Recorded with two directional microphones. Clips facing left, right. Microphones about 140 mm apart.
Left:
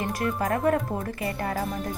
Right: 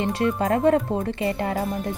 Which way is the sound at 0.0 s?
25° right (ahead or behind).